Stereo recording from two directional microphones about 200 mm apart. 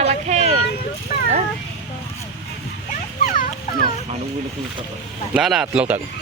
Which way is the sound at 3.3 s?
40° left (ahead or behind).